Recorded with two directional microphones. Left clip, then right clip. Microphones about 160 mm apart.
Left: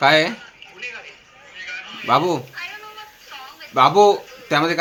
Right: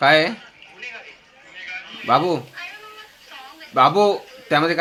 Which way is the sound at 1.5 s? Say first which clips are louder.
Left 1 dB; 90° left.